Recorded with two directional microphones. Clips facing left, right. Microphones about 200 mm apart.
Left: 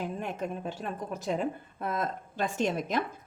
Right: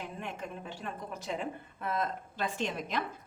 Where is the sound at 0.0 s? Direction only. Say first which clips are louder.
Left 6 dB; 40° left (ahead or behind).